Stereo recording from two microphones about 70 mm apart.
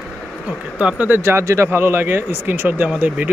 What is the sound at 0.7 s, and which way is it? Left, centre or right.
Speech, centre.